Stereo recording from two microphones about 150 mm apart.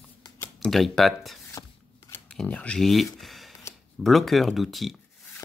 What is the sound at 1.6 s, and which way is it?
Shuffling cards, 20° left (ahead or behind).